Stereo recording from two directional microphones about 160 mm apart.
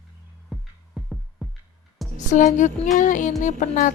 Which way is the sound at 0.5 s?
Centre (ahead or behind).